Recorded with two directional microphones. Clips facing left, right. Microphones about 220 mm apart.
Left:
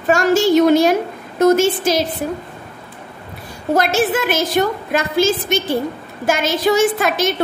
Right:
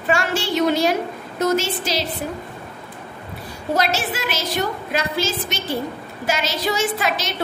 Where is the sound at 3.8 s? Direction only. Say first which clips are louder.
Left 7 dB; 50° left (ahead or behind).